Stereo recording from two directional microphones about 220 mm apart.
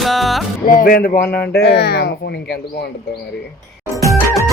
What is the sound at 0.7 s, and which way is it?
Speech, 40° left (ahead or behind).